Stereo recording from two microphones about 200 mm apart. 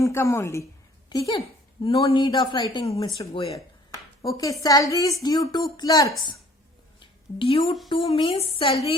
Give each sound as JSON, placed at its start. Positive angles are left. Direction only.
{"t": 0.0, "sound": "a woman's voice", "side_deg": 15}
{"t": 4.2, "sound": "a woman's voice", "side_deg": 15}
{"t": 7.0, "sound": "a sound", "side_deg": 25}
{"t": 8.1, "sound": "a woman's voice", "side_deg": 30}